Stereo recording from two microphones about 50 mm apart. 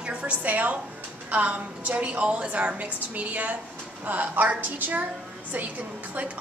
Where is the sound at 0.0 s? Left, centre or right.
Right.